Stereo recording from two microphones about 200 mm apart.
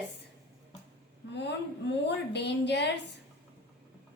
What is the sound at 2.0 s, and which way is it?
Speech, 60° left (ahead or behind).